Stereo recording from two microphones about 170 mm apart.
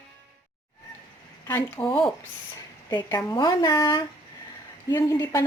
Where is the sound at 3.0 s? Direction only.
20° left (ahead or behind).